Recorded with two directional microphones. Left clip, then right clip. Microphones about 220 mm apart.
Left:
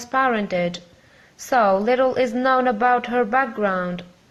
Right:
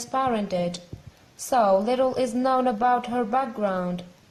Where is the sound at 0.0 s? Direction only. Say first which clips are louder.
Left 5 dB; 15° left (ahead or behind).